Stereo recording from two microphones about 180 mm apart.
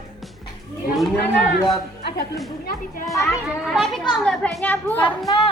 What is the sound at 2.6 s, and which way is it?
Speech, 50° left (ahead or behind).